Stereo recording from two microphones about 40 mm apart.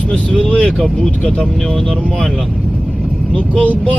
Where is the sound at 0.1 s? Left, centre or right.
Left.